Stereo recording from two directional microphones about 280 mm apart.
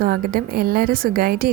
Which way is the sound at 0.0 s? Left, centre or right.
Right.